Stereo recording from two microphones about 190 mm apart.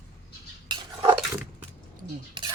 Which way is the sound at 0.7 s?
25° right (ahead or behind).